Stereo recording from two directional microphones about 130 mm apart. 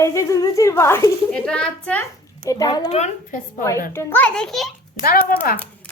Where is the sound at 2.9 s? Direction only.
60° left (ahead or behind).